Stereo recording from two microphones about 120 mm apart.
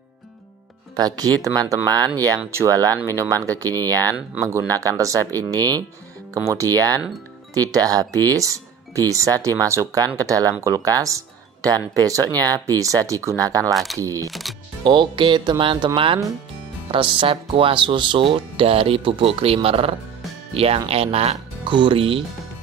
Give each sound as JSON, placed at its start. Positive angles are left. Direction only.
{"t": 0.9, "sound": "speech", "side_deg": -35}
{"t": 14.8, "sound": "speech", "side_deg": -40}
{"t": 21.6, "sound": "speech", "side_deg": -40}